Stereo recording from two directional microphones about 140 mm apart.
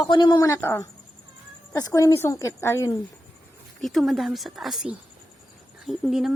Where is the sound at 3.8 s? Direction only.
Centre (ahead or behind).